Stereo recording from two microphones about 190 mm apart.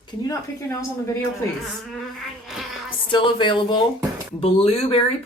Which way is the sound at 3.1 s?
25° left (ahead or behind).